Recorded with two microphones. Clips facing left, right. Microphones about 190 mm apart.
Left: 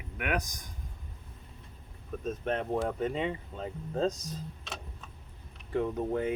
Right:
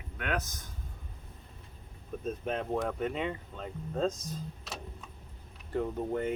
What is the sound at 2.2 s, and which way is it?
Speech, centre (ahead or behind).